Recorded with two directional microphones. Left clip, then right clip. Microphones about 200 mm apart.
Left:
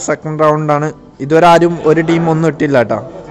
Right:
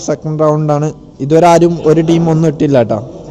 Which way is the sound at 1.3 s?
25° left (ahead or behind).